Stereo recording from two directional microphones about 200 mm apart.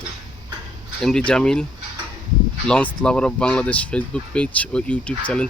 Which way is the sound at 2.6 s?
5° left (ahead or behind).